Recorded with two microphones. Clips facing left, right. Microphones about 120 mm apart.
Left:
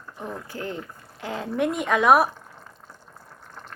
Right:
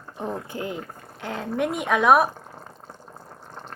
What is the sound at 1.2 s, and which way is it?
Speech, centre (ahead or behind).